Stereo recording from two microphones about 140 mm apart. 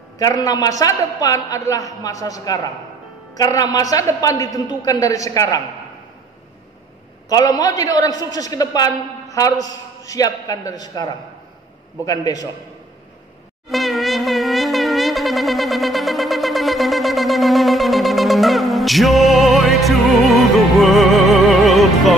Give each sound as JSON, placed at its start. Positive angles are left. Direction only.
{"t": 0.2, "sound": "a man's voice", "side_deg": 25}
{"t": 7.2, "sound": "a man's voice", "side_deg": 25}
{"t": 13.7, "sound": "shofar", "side_deg": 0}